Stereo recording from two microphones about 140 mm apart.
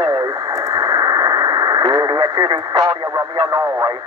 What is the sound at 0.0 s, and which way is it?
Radio, 25° right (ahead or behind).